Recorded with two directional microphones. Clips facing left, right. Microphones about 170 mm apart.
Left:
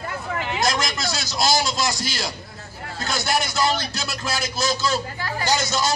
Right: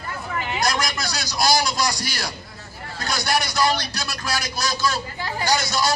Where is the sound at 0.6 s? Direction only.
25° left (ahead or behind).